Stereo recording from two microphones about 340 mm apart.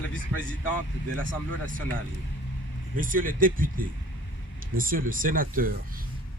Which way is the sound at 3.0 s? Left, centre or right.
Right.